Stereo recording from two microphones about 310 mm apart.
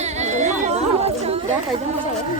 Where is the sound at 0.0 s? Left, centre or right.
Right.